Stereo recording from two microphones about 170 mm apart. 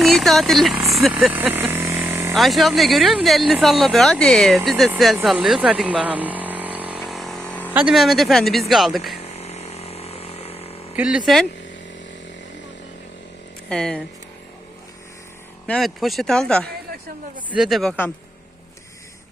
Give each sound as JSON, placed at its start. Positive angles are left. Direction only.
{"t": 0.0, "sound": "speech", "side_deg": 0}
{"t": 0.9, "sound": "vehicle", "side_deg": 0}
{"t": 2.3, "sound": "speech", "side_deg": 0}
{"t": 4.9, "sound": "a sound", "side_deg": 0}
{"t": 7.7, "sound": "speech", "side_deg": -5}
{"t": 9.2, "sound": "a sound", "side_deg": 40}
{"t": 10.9, "sound": "speech", "side_deg": -5}
{"t": 13.7, "sound": "speech", "side_deg": 5}
{"t": 15.6, "sound": "speech", "side_deg": 0}